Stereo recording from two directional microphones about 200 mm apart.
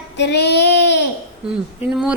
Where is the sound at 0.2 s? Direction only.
55° left (ahead or behind).